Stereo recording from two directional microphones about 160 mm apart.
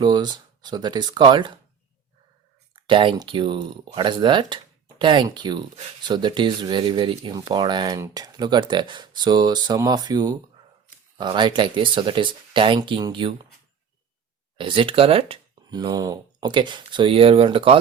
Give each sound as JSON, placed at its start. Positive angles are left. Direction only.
{"t": 0.0, "sound": "speech", "side_deg": -25}
{"t": 2.7, "sound": "speech", "side_deg": -30}
{"t": 14.6, "sound": "speech", "side_deg": -35}